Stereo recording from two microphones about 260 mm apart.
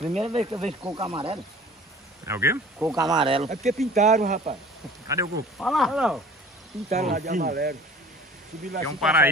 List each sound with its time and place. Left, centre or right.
0.0 s speech: right
2.2 s speech: centre; by 4.6 s right
5.0 s speech: centre
5.6 s speech: centre
6.9 s speech: right
9.0 s speech: centre